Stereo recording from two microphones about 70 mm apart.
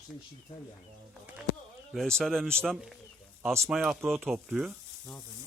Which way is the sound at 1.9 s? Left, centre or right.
Centre.